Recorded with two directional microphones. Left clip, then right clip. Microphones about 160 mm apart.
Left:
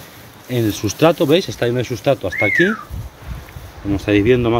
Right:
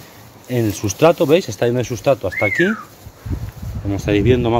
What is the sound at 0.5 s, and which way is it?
Speech, 20° right (ahead or behind).